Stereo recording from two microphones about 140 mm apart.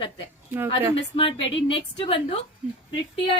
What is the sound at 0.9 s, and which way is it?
A woman's voice, 40° left (ahead or behind).